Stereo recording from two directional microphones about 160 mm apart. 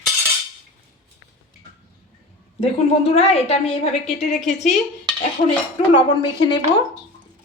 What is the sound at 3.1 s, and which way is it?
Speech, 40° left (ahead or behind).